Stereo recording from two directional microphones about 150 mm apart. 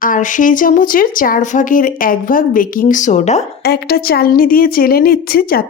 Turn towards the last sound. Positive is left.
turn(degrees=85)